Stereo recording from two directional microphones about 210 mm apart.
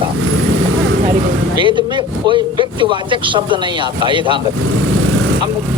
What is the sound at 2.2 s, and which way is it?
Speech, 25° right (ahead or behind).